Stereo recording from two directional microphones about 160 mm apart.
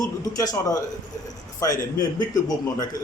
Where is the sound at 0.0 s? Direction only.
20° left (ahead or behind).